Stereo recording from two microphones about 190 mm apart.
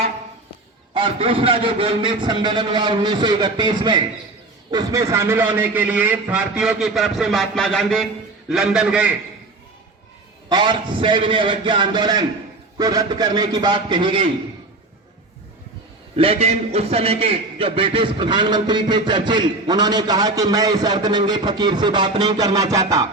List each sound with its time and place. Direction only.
0.9 s a man's voice: 30° right (ahead or behind); by 9.1 s 5° right (ahead or behind)
10.5 s a man's voice: 25° right (ahead or behind)
16.1 s a man's voice: 30° right (ahead or behind)